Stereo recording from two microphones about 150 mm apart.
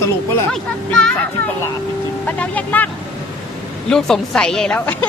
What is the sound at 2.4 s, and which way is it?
Speech, 10° left (ahead or behind).